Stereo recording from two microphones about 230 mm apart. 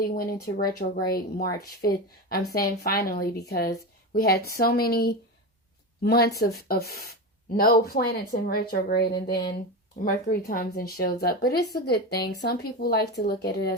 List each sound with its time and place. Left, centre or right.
0.4 s a woman's voice: left